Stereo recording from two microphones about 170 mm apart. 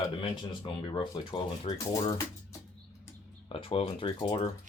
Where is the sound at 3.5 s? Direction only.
35° left (ahead or behind).